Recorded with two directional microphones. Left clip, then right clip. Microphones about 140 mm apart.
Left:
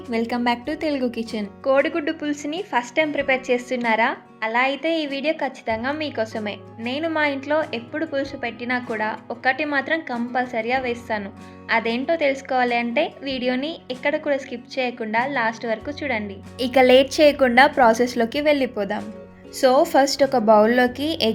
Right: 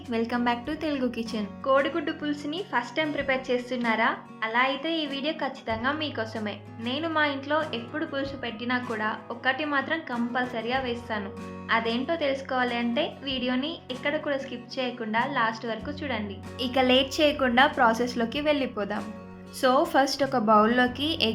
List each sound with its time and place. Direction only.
0.1 s a woman's voice: 35° left (ahead or behind)
1.6 s a woman's voice: 50° left (ahead or behind)